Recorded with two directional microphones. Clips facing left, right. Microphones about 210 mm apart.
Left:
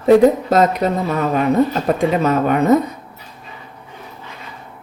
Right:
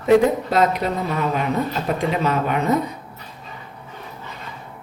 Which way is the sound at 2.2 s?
45° left (ahead or behind).